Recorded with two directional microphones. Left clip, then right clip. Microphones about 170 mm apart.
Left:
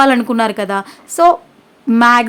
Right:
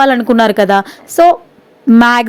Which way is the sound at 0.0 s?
30° right (ahead or behind).